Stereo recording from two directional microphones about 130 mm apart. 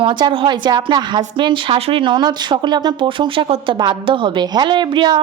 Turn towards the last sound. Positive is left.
turn(degrees=-35)  # may be behind; listen again after turning